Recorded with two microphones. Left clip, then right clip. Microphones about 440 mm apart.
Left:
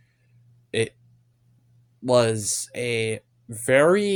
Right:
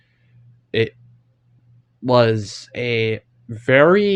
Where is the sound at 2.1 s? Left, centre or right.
Left.